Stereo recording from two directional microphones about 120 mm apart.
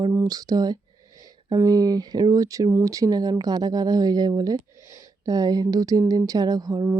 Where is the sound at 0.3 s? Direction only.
30° right (ahead or behind).